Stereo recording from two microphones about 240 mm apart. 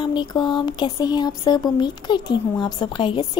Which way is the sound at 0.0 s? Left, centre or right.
Centre.